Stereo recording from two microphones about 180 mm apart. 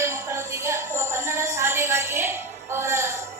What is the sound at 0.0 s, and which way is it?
Music, 15° right (ahead or behind).